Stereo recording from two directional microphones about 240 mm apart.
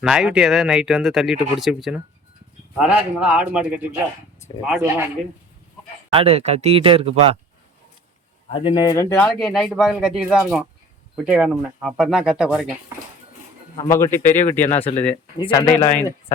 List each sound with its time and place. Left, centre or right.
0.0 s speech: centre
6.1 s speech: right
8.5 s speech: centre
9.3 s speech: centre
13.8 s speech: centre
15.4 s speech: centre